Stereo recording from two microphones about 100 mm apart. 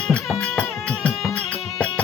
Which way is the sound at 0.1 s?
10° left (ahead or behind).